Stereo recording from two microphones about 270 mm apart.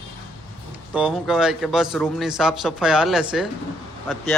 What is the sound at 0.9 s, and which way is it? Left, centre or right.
Speech, centre.